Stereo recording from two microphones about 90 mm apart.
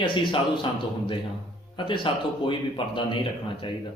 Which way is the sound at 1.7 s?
65° left (ahead or behind).